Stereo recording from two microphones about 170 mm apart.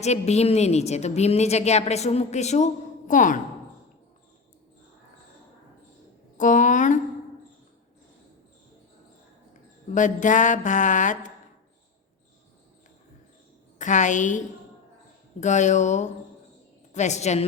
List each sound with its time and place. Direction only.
0.0 s a woman's voice: 40° left (ahead or behind)
6.3 s a sound: 50° left (ahead or behind)
9.9 s speech: 50° left (ahead or behind)
13.7 s speech: 45° left (ahead or behind)